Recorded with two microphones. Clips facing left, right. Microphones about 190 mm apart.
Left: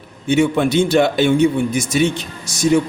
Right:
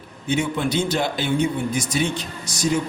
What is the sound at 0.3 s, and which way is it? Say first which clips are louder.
A man's voice: left 7 dB; 85° left.